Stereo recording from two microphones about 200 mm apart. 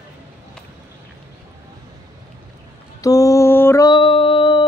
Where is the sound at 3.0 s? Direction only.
15° left (ahead or behind).